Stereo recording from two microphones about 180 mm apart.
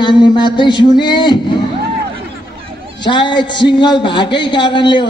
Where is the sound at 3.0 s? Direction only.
25° left (ahead or behind).